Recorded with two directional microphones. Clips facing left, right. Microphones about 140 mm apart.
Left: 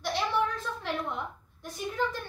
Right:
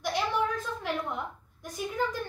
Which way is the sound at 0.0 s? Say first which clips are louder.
Even; 10° right (ahead or behind).